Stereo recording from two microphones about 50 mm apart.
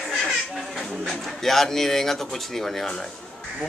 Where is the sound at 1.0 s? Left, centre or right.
Centre.